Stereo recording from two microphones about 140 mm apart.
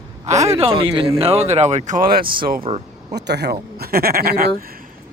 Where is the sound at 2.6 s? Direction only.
45° right (ahead or behind).